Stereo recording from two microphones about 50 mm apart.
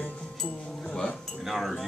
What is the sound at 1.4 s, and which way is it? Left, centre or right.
Speech, centre.